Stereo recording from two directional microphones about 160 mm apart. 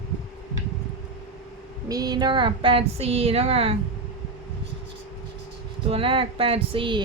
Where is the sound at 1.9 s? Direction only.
25° right (ahead or behind).